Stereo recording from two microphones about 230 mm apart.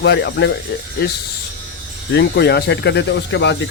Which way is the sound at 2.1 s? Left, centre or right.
Left.